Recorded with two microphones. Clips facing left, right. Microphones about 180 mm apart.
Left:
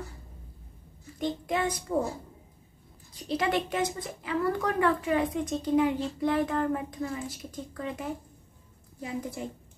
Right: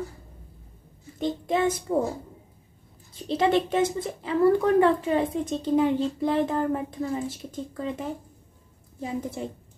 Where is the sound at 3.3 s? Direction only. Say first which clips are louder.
Right 6 dB; 25° right (ahead or behind).